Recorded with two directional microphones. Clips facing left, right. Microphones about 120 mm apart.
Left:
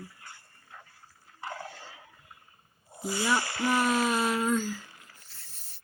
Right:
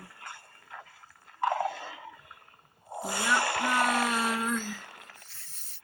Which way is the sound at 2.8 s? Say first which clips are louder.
Left 1 dB; 55° right (ahead or behind).